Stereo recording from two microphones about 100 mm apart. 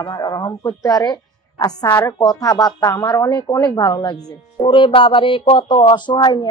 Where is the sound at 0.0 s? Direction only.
45° left (ahead or behind).